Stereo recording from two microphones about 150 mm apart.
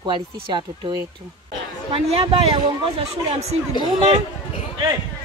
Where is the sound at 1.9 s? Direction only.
40° right (ahead or behind).